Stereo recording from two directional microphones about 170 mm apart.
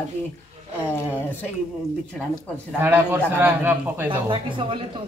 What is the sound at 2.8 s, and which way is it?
Speech, 10° right (ahead or behind).